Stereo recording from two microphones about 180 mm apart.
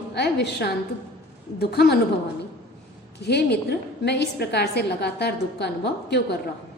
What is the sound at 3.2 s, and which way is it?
A woman's voice, 65° left (ahead or behind).